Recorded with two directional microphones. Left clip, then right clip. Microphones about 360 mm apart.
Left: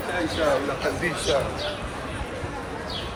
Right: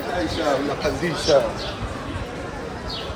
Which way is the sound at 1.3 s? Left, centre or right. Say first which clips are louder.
Right 7 dB; right.